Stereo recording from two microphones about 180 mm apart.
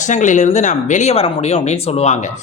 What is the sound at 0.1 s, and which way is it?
A man's voice, 45° left (ahead or behind).